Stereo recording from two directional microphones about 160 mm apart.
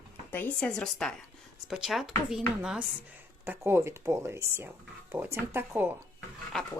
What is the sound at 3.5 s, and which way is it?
Speech, 15° right (ahead or behind).